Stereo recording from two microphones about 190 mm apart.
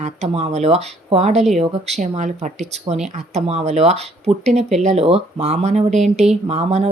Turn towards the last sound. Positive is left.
turn(degrees=-35)  # may be behind; listen again after turning